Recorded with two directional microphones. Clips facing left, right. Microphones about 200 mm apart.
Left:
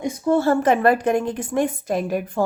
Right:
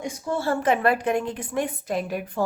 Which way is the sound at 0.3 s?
50° left (ahead or behind).